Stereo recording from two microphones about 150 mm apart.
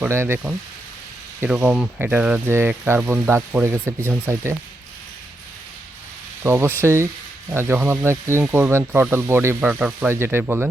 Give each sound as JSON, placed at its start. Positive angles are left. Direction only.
{"t": 0.0, "sound": "speech", "side_deg": -15}
{"t": 1.4, "sound": "speech", "side_deg": -15}
{"t": 6.4, "sound": "speech", "side_deg": -15}